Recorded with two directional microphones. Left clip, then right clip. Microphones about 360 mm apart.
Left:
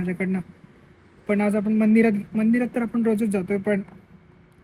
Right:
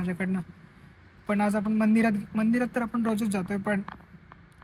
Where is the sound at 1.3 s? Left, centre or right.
Centre.